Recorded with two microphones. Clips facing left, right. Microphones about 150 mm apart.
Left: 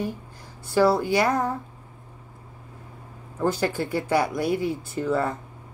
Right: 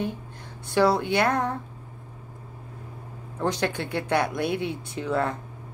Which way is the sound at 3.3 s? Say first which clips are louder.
Left 2 dB; 5° left (ahead or behind).